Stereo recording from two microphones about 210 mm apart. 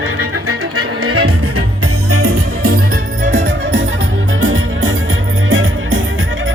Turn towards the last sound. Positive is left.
turn(degrees=-65)  # may be behind; listen again after turning